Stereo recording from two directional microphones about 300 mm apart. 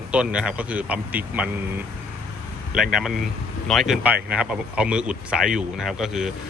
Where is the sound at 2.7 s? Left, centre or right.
Centre.